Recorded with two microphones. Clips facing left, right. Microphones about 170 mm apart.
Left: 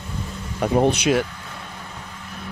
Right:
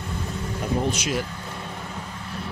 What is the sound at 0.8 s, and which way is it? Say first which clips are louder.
Speech: left 7 dB; 65° left (ahead or behind).